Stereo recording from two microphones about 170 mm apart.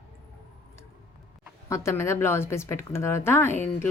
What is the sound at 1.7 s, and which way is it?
A woman's voice, 15° left (ahead or behind).